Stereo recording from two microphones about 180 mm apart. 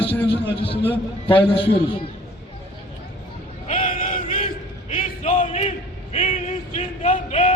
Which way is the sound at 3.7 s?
40° left (ahead or behind).